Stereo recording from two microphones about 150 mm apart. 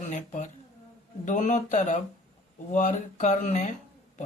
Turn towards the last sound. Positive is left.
turn(degrees=50)  # may be behind; listen again after turning